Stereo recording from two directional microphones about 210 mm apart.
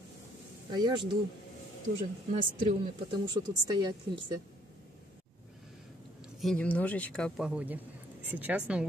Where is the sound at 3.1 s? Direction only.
20° right (ahead or behind).